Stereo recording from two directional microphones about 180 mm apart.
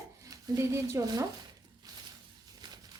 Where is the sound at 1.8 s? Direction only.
20° right (ahead or behind).